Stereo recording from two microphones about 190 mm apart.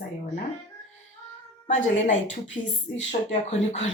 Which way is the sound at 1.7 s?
40° left (ahead or behind).